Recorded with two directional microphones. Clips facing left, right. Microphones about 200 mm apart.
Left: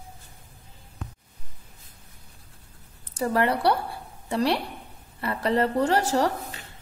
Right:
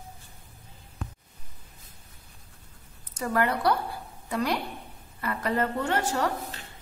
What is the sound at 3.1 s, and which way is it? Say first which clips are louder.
A woman's voice: left 3 dB; 30° left (ahead or behind).